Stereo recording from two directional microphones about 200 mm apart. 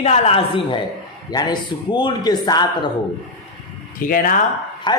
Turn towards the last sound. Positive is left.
turn(degrees=20)  # may be behind; listen again after turning